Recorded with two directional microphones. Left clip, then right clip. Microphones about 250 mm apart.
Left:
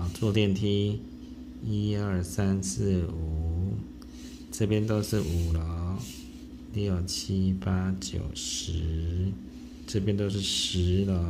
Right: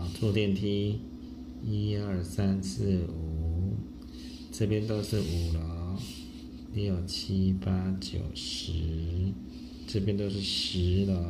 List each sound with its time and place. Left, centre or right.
0.2 s speech: left
4.6 s speech: left